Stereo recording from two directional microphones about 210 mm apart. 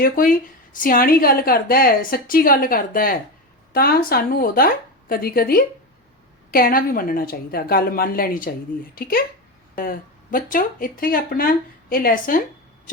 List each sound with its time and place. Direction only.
0.0 s a woman's voice: 40° left (ahead or behind)